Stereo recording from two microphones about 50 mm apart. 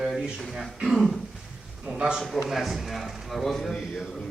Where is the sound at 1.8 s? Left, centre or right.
Centre.